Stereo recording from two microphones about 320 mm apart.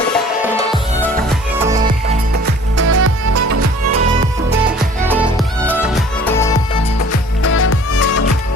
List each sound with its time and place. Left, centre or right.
0.4 s music: centre
2.7 s music: right
5.0 s music: centre
7.6 s music: left